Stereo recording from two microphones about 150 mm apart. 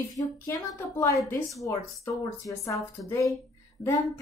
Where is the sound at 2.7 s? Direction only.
20° left (ahead or behind).